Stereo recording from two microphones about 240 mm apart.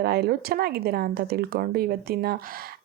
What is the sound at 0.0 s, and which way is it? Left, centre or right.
Speech, right.